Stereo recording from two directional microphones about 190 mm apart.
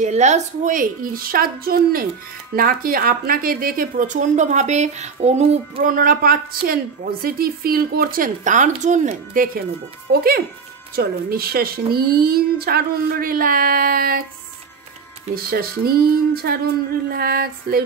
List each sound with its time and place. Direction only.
0.0 s a woman's voice: 40° right (ahead or behind)
5.8 s a woman's voice: 45° right (ahead or behind)
15.3 s a woman's voice: 55° right (ahead or behind)